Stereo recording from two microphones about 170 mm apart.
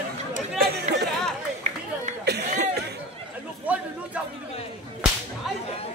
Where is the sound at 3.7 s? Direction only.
10° right (ahead or behind).